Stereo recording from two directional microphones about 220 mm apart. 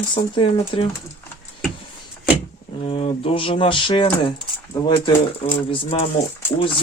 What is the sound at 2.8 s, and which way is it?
Speech, 25° left (ahead or behind).